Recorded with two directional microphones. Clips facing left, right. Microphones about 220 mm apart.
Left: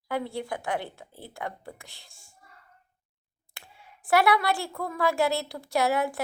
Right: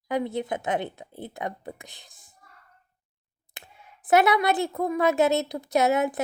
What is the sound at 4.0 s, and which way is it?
A woman's voice, 20° right (ahead or behind).